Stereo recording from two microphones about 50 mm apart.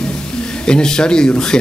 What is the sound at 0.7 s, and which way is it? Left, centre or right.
Speech, centre.